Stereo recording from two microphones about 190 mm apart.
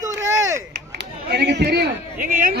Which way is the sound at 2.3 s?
45° right (ahead or behind).